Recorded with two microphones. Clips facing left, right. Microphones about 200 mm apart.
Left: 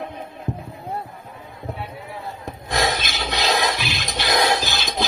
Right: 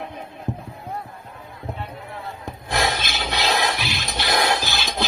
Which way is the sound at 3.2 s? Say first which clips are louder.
Left 1 dB; 15° left (ahead or behind).